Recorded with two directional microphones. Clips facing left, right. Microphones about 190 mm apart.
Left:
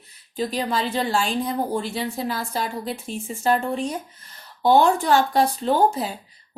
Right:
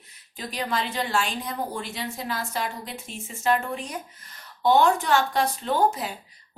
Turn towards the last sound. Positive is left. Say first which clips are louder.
# left 4 dB
turn(degrees=35)  # may be behind; listen again after turning